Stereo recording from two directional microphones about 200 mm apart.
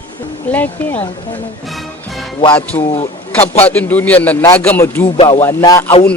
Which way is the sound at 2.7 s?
20° left (ahead or behind).